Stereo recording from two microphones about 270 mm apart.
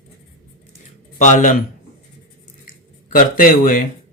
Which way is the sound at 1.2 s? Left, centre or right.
Left.